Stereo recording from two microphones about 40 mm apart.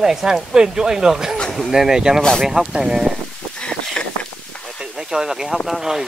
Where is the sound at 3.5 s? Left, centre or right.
Left.